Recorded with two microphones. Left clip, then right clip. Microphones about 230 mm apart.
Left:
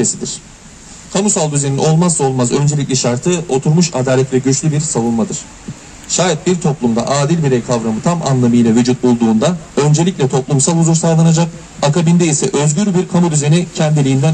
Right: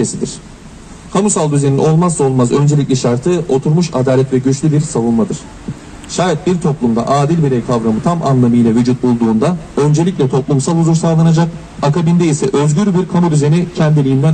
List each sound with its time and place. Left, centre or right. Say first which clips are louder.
0.0 s a man's voice: even; left